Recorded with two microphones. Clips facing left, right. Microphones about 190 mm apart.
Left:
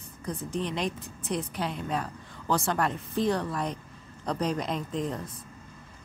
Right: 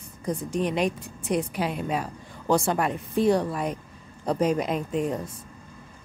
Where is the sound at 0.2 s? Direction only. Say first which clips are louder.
Right 5 dB; 10° right (ahead or behind).